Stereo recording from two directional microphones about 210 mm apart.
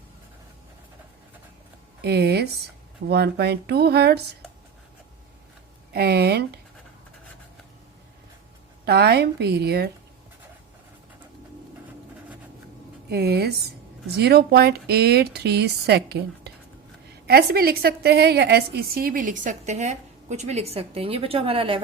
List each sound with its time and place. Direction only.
2.0 s speech: 50° right (ahead or behind)
5.9 s speech: 50° right (ahead or behind)
8.8 s speech: 50° right (ahead or behind)
13.1 s a woman's voice: 50° right (ahead or behind); by 21.8 s 25° right (ahead or behind)